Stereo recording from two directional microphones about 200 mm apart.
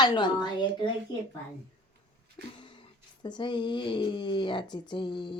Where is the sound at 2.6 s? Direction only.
25° left (ahead or behind).